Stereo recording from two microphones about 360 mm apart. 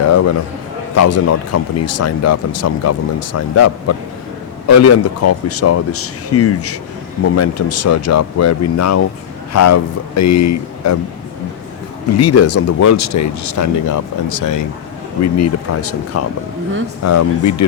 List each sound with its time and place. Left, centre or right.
0.0 s a man's voice: left
12.1 s speech: left
15.2 s speech: left